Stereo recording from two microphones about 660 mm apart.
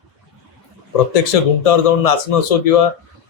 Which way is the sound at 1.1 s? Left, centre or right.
Left.